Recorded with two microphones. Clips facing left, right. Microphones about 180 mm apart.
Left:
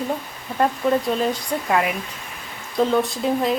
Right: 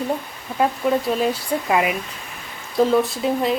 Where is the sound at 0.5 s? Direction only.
5° right (ahead or behind).